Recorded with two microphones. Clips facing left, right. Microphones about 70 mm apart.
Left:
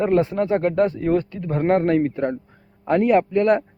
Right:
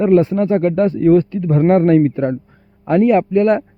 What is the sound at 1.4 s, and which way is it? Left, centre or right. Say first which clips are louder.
A man's voice: right 3 dB; centre.